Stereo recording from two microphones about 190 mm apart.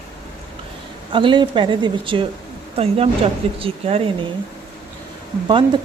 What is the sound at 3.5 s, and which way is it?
Speech, 30° right (ahead or behind).